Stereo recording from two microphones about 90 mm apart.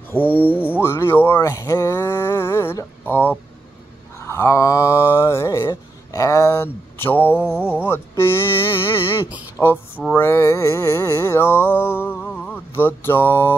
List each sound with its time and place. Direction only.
0.1 s speech: 20° left (ahead or behind)
4.3 s mantra: 30° left (ahead or behind)
7.4 s a sound: 15° right (ahead or behind)
7.7 s speech: 25° left (ahead or behind)
9.6 s speech: centre (ahead or behind)
10.1 s mantra: 30° left (ahead or behind)